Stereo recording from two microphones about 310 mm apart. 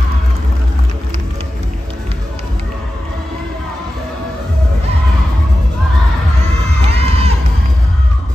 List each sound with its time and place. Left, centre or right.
6.9 s crowd: centre